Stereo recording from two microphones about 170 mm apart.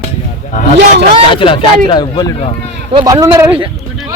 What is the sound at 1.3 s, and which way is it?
Speech, 30° left (ahead or behind).